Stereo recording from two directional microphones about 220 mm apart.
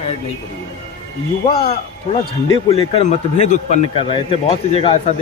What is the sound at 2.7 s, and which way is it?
A man's voice, 30° left (ahead or behind).